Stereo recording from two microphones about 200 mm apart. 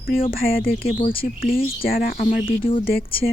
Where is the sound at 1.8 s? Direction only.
45° left (ahead or behind).